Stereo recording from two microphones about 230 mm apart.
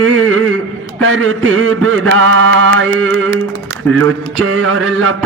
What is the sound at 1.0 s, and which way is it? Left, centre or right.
Mantra, right.